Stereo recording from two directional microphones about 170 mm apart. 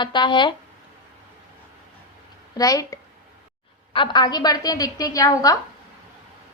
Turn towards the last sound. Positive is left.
turn(degrees=20)  # may be behind; listen again after turning